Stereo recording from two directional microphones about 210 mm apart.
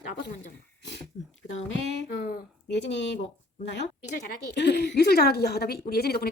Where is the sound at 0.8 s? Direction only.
55° left (ahead or behind).